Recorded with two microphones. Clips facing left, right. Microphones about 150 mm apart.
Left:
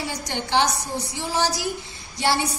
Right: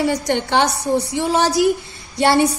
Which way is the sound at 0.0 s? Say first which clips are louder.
Right 11 dB; 60° right (ahead or behind).